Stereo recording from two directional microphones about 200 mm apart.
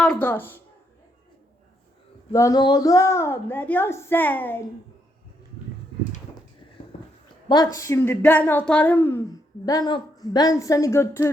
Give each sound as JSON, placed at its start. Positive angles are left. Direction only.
{"t": 0.0, "sound": "a child's voice", "side_deg": 5}
{"t": 2.3, "sound": "a child's voice", "side_deg": 15}
{"t": 6.9, "sound": "a sound", "side_deg": 35}
{"t": 7.4, "sound": "a child's voice", "side_deg": 20}